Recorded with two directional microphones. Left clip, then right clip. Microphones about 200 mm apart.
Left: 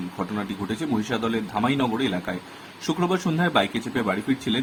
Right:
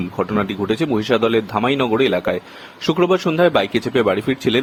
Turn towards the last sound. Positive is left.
turn(degrees=-40)  # may be behind; listen again after turning